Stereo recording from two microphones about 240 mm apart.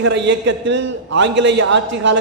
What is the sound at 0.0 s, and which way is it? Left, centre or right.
A man's voice, right.